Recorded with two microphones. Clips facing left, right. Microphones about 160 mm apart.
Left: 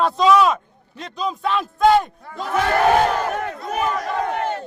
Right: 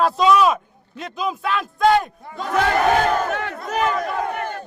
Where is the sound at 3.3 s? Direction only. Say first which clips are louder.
Even; 85° right.